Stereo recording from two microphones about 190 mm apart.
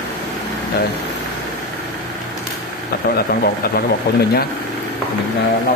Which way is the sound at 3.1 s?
55° left (ahead or behind).